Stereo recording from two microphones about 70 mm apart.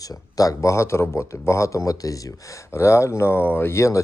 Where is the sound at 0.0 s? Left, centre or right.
Left.